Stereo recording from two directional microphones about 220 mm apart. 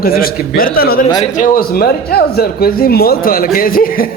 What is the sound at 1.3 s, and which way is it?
Speech, 40° left (ahead or behind).